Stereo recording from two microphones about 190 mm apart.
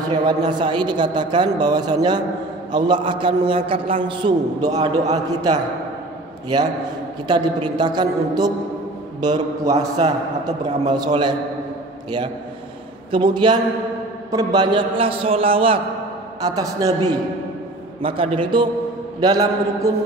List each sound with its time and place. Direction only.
0.1 s a woman's voice: 25° right (ahead or behind)
13.1 s a woman's voice: 25° right (ahead or behind)
18.0 s a woman's voice: 30° right (ahead or behind)